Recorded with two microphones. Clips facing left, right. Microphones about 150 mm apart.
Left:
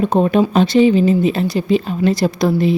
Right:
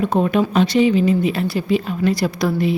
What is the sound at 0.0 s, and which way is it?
Speech, 30° left (ahead or behind).